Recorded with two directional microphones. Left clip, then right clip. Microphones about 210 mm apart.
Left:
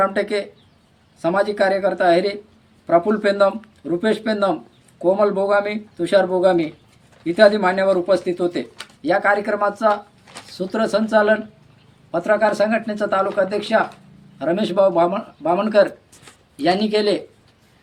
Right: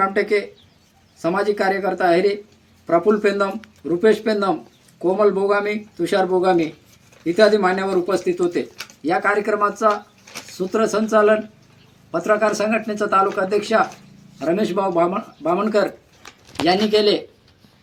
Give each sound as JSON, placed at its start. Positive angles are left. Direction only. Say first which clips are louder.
{"t": 0.0, "sound": "speech", "louder": "right 1 dB", "side_deg": 15}